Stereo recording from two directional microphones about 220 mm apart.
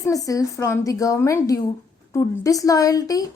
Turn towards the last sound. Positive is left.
turn(degrees=15)  # may be behind; listen again after turning